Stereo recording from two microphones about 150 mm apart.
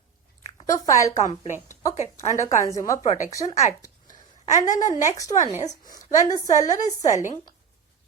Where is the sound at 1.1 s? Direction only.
50° left (ahead or behind).